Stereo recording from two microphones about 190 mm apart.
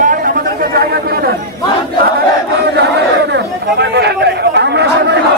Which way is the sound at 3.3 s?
60° right (ahead or behind).